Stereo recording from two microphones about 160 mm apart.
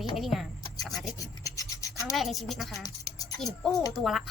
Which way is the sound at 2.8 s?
20° left (ahead or behind).